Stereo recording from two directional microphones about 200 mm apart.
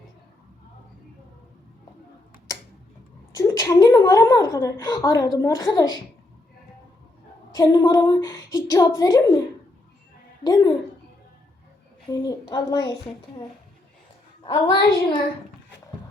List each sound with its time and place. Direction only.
3.3 s a woman's voice: 15° left (ahead or behind)
7.5 s a woman's voice: 20° left (ahead or behind)
10.4 s a woman's voice: 20° left (ahead or behind)
12.1 s a woman's voice: 20° left (ahead or behind)
14.4 s a woman's voice: 20° left (ahead or behind)